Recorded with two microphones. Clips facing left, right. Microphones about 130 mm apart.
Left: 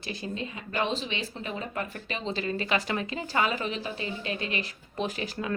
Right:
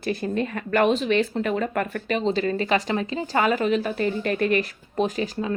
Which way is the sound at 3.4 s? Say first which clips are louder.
Right 9 dB; 45° right (ahead or behind).